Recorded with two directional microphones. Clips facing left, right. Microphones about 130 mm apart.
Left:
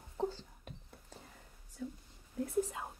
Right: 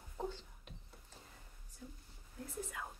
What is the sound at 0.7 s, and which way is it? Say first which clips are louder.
Whispering: left 6 dB; 50° left (ahead or behind).